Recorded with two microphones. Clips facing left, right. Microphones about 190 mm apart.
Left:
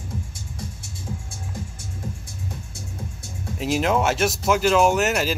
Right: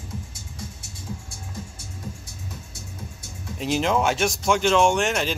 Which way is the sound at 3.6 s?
5° left (ahead or behind).